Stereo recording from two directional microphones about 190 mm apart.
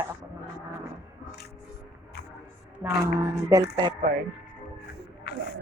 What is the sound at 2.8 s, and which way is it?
Speech, 15° right (ahead or behind).